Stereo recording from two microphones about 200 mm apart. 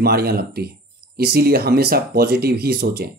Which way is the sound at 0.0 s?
50° right (ahead or behind).